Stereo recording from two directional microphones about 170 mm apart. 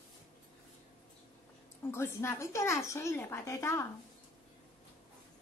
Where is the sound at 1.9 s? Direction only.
15° left (ahead or behind).